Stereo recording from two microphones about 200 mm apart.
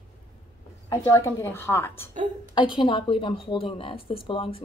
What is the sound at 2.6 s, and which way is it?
A woman's voice, 25° left (ahead or behind).